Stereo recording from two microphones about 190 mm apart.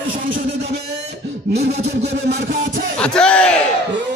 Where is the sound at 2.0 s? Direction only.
65° right (ahead or behind).